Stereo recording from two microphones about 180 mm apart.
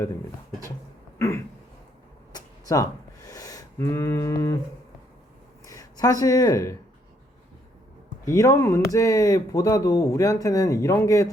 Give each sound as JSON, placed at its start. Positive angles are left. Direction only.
{"t": 2.3, "sound": "a sound", "side_deg": 20}
{"t": 5.6, "sound": "speech", "side_deg": 20}
{"t": 8.3, "sound": "speech", "side_deg": 15}